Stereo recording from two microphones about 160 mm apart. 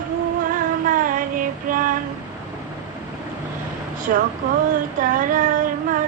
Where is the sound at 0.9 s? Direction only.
60° right (ahead or behind).